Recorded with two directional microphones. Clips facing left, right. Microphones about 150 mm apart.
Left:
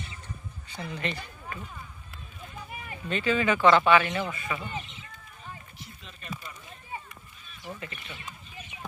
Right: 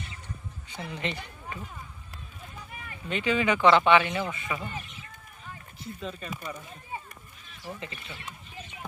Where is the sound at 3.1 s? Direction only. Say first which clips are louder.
Even; 15° right (ahead or behind).